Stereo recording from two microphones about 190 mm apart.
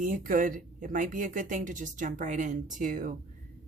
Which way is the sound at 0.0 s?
45° right (ahead or behind).